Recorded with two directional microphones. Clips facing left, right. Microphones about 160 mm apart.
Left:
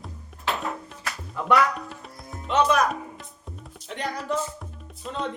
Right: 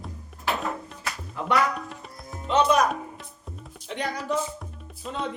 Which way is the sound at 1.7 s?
Centre (ahead or behind).